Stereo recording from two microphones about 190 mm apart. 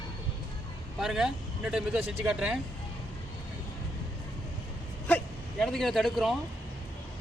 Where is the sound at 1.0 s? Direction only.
Centre (ahead or behind).